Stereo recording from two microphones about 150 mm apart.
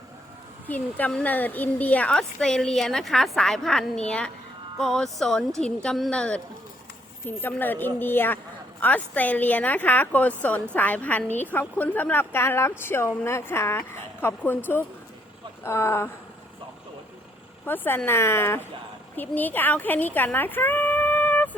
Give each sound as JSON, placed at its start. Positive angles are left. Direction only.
{"t": 0.7, "sound": "a woman's voice", "side_deg": 10}
{"t": 17.7, "sound": "a woman's voice", "side_deg": 15}